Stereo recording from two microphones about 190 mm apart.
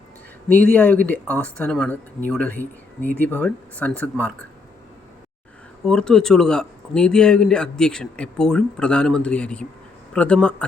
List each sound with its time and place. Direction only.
0.4 s speech: 5° left (ahead or behind)
5.8 s speech: 5° left (ahead or behind)